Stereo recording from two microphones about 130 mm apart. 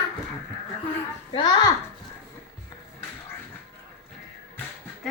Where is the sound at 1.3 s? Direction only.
35° left (ahead or behind).